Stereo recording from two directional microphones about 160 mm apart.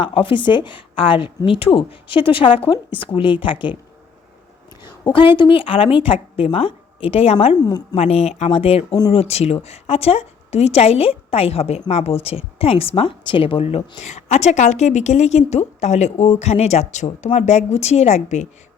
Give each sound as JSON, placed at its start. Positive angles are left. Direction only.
{"t": 0.0, "sound": "a woman's voice", "side_deg": 35}
{"t": 5.0, "sound": "a woman's voice", "side_deg": 30}